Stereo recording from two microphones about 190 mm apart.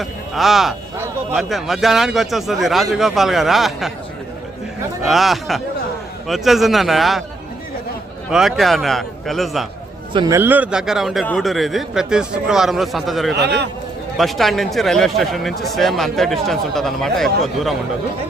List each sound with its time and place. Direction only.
0.0 s speech: centre (ahead or behind)
5.0 s speech: centre (ahead or behind)
8.3 s speech: centre (ahead or behind)
10.1 s speech: 20° right (ahead or behind); by 13.3 s centre (ahead or behind)
13.3 s a man's voice: 60° right (ahead or behind)
14.2 s speech: centre (ahead or behind)